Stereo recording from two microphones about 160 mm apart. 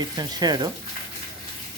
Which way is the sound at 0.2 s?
25° right (ahead or behind).